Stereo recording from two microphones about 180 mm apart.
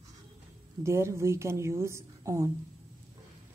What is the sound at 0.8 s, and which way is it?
A woman's voice, 15° right (ahead or behind).